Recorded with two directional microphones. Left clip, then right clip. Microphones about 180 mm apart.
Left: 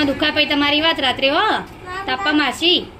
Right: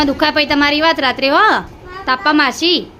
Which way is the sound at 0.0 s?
35° right (ahead or behind).